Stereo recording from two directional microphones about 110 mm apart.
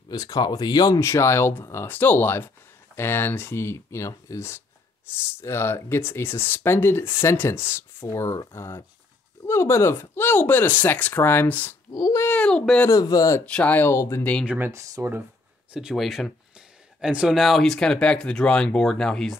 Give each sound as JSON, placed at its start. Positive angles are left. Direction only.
{"t": 0.1, "sound": "speech", "side_deg": 35}
{"t": 11.9, "sound": "speech", "side_deg": 35}
{"t": 12.2, "sound": "a child's voice", "side_deg": 10}
{"t": 12.8, "sound": "speech", "side_deg": 35}
{"t": 13.5, "sound": "speech", "side_deg": 10}
{"t": 14.4, "sound": "speech", "side_deg": -10}
{"t": 14.7, "sound": "speech", "side_deg": -30}
{"t": 15.7, "sound": "speech", "side_deg": -5}